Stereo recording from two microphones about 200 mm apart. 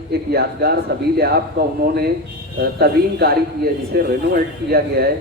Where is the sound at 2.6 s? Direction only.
50° right (ahead or behind).